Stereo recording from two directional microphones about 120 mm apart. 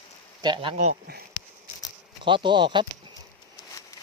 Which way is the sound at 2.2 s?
40° right (ahead or behind).